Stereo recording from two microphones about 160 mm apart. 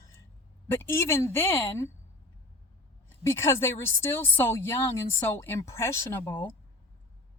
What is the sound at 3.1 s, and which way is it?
A woman's voice, 15° left (ahead or behind).